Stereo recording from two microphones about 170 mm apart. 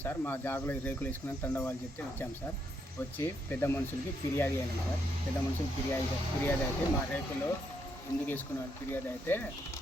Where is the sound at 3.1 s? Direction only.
10° left (ahead or behind).